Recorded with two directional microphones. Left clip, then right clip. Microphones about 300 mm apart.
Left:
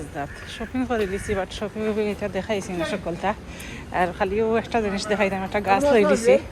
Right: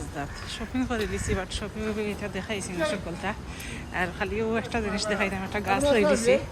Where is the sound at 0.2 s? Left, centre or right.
Centre.